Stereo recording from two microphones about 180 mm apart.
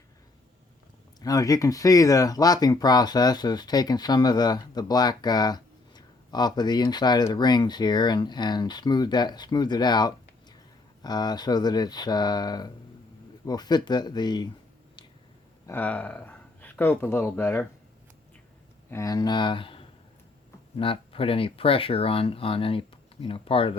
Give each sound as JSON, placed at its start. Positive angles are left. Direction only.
{"t": 1.2, "sound": "speech", "side_deg": 20}
{"t": 15.6, "sound": "speech", "side_deg": 10}
{"t": 18.9, "sound": "speech", "side_deg": 15}